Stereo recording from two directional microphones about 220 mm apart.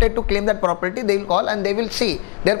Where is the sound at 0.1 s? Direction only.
20° left (ahead or behind).